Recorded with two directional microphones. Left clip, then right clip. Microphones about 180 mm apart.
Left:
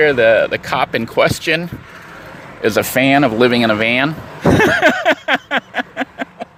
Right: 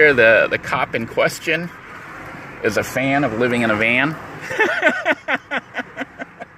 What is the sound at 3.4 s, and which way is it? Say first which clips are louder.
Speech: left 3 dB; 25° left (ahead or behind).